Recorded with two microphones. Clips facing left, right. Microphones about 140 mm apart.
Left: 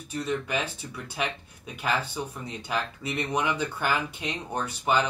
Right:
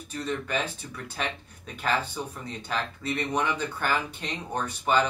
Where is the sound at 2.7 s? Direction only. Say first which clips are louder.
Even; 10° left (ahead or behind).